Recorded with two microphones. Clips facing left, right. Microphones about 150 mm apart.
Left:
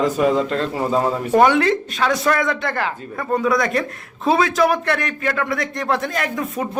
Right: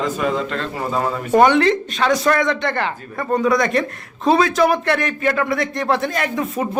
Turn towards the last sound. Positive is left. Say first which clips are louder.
# right 2 dB
turn(degrees=0)  # may be behind; listen again after turning